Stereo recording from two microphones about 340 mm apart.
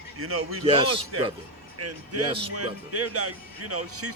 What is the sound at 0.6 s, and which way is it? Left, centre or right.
Speech, centre.